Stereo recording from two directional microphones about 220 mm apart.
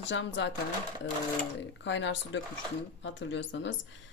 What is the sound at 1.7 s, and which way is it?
Speech, 55° left (ahead or behind).